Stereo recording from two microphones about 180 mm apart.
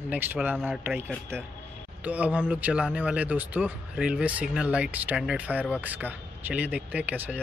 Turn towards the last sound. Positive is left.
turn(degrees=-10)  # may be behind; listen again after turning